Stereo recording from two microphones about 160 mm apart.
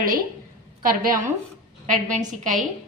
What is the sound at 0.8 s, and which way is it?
Speech, 60° right (ahead or behind).